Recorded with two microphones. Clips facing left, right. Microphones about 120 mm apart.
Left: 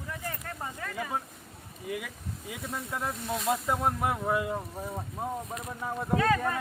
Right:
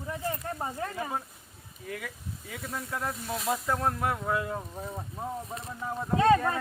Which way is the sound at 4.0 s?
15° left (ahead or behind).